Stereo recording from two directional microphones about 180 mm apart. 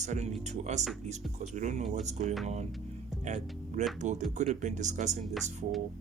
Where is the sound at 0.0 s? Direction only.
40° right (ahead or behind).